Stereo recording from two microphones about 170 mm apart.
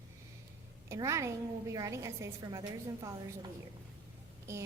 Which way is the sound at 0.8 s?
15° right (ahead or behind).